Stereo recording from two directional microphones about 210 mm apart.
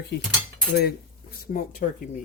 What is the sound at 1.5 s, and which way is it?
Speech, 40° left (ahead or behind).